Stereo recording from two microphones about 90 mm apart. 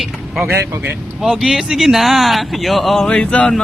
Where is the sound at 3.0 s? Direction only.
10° left (ahead or behind).